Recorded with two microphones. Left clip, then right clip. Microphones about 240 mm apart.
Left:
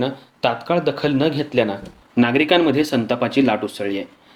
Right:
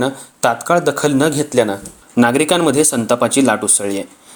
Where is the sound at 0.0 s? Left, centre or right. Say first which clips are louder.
Right 4 dB; right.